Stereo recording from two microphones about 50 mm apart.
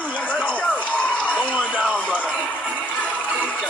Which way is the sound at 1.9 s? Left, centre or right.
Left.